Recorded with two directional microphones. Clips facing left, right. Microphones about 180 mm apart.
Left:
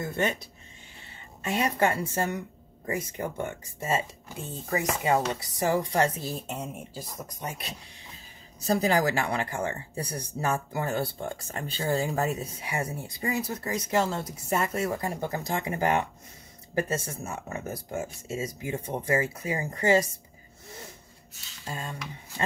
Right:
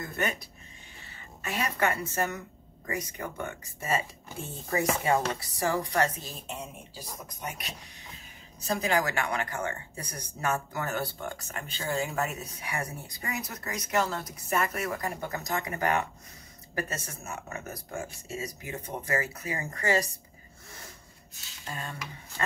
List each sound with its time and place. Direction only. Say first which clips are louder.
0.0 s speech: left 4 dB; 25° left (ahead or behind)
6.4 s speech: left 4 dB; 45° left (ahead or behind)
7.4 s speech: left 1 dB; 30° left (ahead or behind)
21.6 s speech: left 2 dB; 25° left (ahead or behind)